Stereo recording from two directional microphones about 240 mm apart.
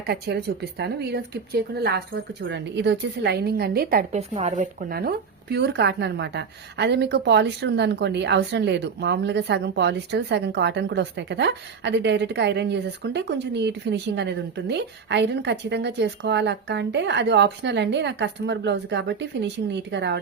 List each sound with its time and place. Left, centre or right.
0.1 s speech: right